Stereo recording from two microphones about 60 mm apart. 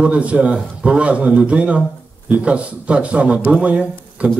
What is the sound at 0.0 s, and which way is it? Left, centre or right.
A man's voice, right.